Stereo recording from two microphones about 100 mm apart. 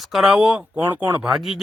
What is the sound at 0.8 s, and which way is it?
Speech, 20° right (ahead or behind).